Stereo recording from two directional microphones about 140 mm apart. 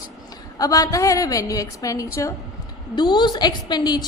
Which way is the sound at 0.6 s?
25° left (ahead or behind).